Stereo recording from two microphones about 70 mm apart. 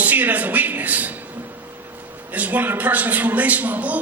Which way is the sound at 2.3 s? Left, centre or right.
Right.